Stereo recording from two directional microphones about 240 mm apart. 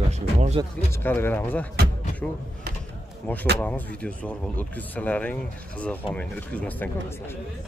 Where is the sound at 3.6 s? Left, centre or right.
Centre.